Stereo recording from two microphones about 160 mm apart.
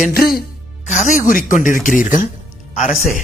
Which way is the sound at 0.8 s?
45° left (ahead or behind).